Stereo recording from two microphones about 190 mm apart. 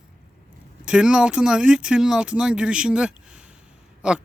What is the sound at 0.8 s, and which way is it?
Speech, 5° right (ahead or behind).